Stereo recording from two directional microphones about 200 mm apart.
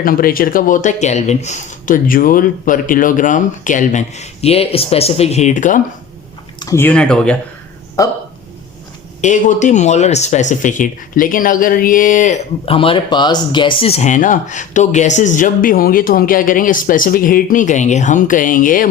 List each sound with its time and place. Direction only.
0.0 s speech: 45° left (ahead or behind)
6.6 s speech: 15° left (ahead or behind)
8.0 s speech: 15° left (ahead or behind)
9.2 s speech: 35° left (ahead or behind)